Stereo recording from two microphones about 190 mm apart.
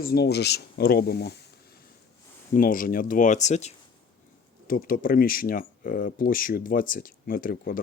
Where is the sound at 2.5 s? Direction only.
45° left (ahead or behind).